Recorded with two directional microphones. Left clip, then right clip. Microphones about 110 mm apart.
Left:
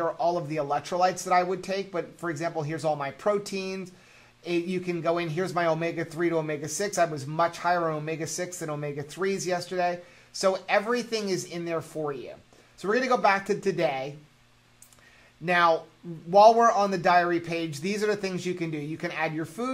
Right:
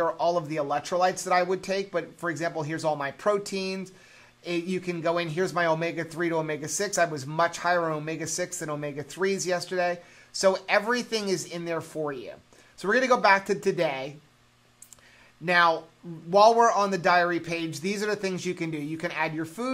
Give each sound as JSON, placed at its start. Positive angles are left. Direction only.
{"t": 0.0, "sound": "speech", "side_deg": -40}
{"t": 15.4, "sound": "speech", "side_deg": -30}